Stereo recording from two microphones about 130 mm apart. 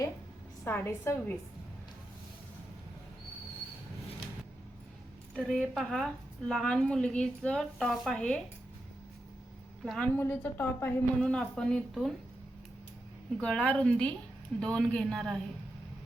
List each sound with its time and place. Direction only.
0.6 s a woman's voice: 15° left (ahead or behind)
5.3 s a woman's voice: 5° left (ahead or behind)
9.8 s a woman's voice: centre (ahead or behind)
10.2 s a woman's voice: 15° left (ahead or behind)
11.2 s a woman's voice: 5° left (ahead or behind)
13.3 s a woman's voice: 5° left (ahead or behind)